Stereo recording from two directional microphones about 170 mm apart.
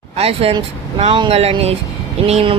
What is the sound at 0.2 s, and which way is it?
Speech, 35° right (ahead or behind).